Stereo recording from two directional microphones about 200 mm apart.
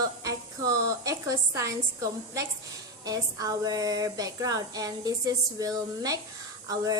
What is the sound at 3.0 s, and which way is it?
Speech, 20° right (ahead or behind).